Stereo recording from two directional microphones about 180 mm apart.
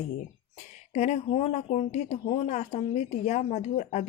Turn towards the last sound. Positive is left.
turn(degrees=40)  # may be behind; listen again after turning